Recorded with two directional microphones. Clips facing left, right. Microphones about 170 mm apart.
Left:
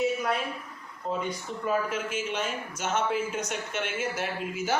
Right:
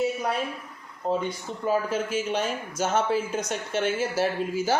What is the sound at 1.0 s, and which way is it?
Speech, 35° right (ahead or behind).